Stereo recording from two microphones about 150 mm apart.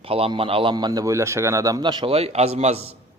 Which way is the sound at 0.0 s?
40° right (ahead or behind).